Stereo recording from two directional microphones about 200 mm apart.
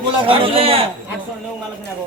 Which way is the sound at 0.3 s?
30° right (ahead or behind).